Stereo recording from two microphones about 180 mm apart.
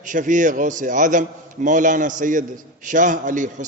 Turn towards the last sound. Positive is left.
turn(degrees=-45)  # may be behind; listen again after turning